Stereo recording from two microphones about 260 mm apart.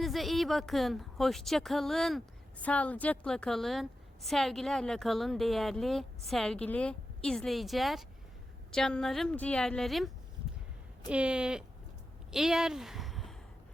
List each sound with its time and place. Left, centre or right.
0.0 s speech: centre
11.1 s speech: centre